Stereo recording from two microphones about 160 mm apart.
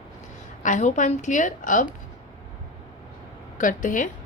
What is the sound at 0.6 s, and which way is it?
A woman's voice, 50° left (ahead or behind).